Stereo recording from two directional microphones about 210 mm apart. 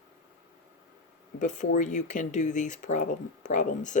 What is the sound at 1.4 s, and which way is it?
Speech, 35° left (ahead or behind).